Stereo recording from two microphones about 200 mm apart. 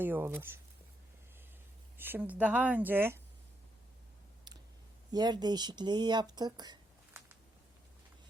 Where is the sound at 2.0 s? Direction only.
10° right (ahead or behind).